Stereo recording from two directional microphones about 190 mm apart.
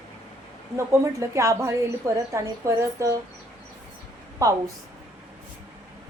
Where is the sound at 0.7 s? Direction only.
15° right (ahead or behind).